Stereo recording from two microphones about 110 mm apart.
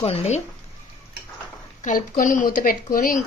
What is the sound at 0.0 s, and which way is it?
Speech, 70° left (ahead or behind).